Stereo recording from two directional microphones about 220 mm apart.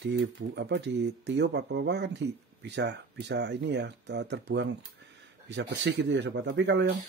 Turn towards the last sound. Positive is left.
turn(degrees=-50)  # may be behind; listen again after turning